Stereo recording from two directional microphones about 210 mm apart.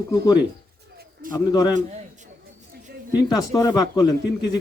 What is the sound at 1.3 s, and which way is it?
Speech, 20° left (ahead or behind).